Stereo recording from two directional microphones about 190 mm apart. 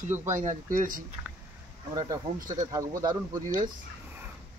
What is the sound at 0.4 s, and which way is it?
Speech, 45° right (ahead or behind).